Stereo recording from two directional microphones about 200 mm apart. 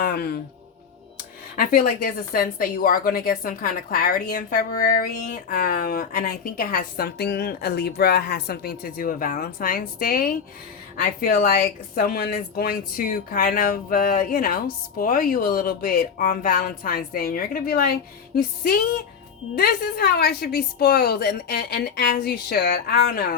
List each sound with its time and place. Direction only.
0.0 s music: 50° left (ahead or behind)
1.5 s a woman's voice: 45° left (ahead or behind)